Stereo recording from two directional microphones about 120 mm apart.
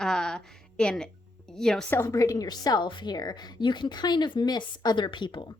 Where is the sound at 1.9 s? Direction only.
20° left (ahead or behind).